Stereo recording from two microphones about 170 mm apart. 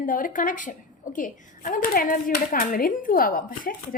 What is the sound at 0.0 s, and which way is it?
A woman's voice, 55° left (ahead or behind).